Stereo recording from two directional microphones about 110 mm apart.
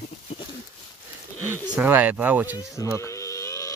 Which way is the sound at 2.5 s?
30° left (ahead or behind).